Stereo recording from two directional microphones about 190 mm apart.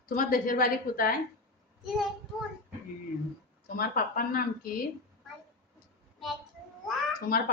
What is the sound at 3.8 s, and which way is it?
Speech, 50° left (ahead or behind).